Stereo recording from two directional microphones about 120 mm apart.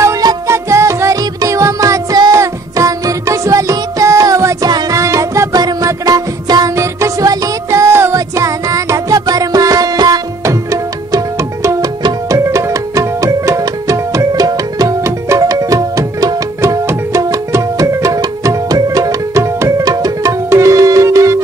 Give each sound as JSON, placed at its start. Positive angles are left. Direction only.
{"t": 0.0, "sound": "music", "side_deg": -30}
{"t": 12.0, "sound": "tabla", "side_deg": -25}